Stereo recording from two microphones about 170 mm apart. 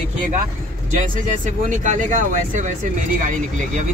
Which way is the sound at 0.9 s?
45° right (ahead or behind).